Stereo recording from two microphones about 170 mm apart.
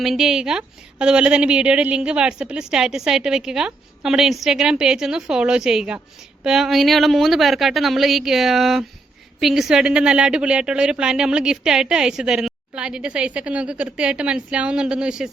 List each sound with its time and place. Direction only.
0.0 s a woman's voice: centre (ahead or behind)